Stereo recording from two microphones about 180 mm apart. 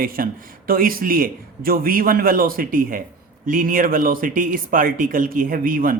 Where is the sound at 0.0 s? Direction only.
50° right (ahead or behind).